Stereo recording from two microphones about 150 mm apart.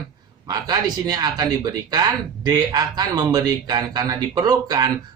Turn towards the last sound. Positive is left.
turn(degrees=-25)  # may be behind; listen again after turning